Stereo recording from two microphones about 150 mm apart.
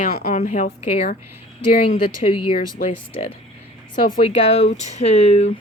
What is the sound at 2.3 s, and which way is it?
Speech, 35° left (ahead or behind).